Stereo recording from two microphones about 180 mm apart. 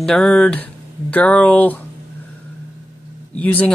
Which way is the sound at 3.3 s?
10° left (ahead or behind).